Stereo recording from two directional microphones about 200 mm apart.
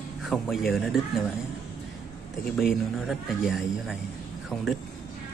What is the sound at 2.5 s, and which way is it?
Speech, centre (ahead or behind).